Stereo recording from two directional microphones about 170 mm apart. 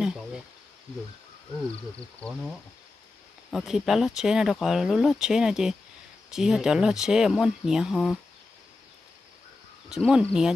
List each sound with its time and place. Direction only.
0.0 s insect: 5° right (ahead or behind)
2.0 s speech: 5° left (ahead or behind)
9.8 s speech: 5° right (ahead or behind)